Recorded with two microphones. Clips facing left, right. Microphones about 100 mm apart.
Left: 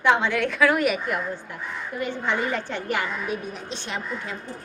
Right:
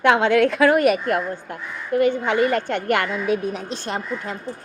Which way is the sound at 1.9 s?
65° right (ahead or behind).